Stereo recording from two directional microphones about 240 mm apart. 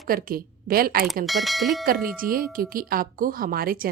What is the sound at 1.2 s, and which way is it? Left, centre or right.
Speech, centre.